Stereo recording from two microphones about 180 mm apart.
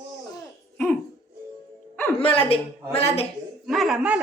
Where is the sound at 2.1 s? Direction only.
30° left (ahead or behind).